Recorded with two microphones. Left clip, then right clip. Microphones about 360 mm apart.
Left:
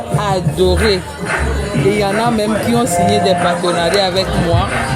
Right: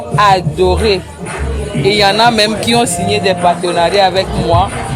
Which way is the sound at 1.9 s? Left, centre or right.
Right.